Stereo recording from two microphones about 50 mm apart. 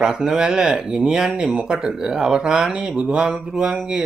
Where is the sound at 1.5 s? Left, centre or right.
Right.